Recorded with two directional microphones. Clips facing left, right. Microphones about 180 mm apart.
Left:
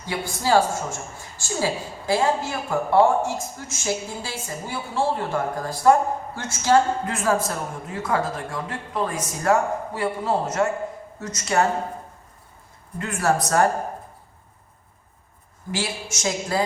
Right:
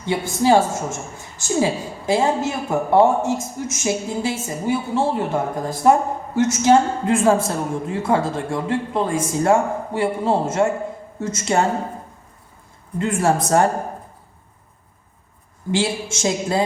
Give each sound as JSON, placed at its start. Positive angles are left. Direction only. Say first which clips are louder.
{"t": 0.0, "sound": "a woman's voice", "louder": "right 7 dB", "side_deg": -20}
{"t": 13.0, "sound": "a woman's voice", "louder": "right 4 dB", "side_deg": -25}
{"t": 15.7, "sound": "a woman's voice", "louder": "right 7 dB", "side_deg": -25}